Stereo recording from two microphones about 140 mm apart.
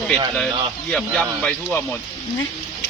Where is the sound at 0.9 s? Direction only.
5° left (ahead or behind).